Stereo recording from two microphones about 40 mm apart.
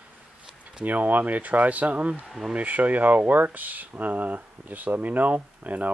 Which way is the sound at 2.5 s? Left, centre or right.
Right.